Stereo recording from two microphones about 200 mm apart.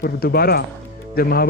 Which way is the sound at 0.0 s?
50° left (ahead or behind).